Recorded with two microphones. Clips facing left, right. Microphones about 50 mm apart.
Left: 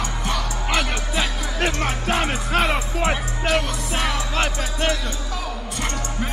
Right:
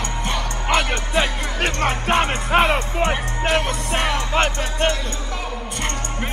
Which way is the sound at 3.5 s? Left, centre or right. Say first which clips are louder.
Right 1 dB; right.